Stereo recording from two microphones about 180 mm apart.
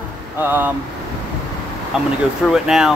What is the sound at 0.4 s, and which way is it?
Speech, 10° right (ahead or behind).